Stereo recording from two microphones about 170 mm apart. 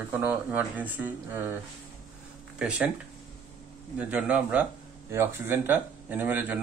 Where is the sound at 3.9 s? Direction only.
10° right (ahead or behind).